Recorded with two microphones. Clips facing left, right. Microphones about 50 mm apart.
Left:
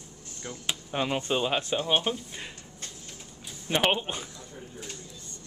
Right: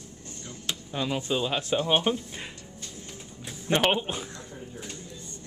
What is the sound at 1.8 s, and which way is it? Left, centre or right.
Speech, centre.